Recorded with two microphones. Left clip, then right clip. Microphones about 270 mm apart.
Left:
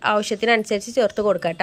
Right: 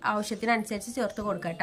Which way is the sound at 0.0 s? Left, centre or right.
Centre.